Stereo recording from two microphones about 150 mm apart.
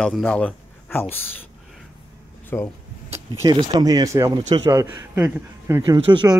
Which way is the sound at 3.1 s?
20° right (ahead or behind).